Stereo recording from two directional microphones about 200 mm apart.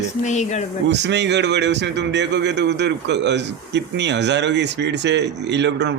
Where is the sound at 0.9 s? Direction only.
60° right (ahead or behind).